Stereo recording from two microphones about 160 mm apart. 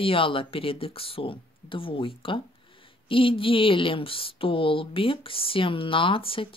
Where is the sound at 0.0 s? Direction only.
35° left (ahead or behind).